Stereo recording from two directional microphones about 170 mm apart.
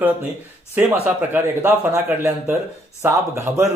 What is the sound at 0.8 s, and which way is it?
A man's voice, 10° right (ahead or behind).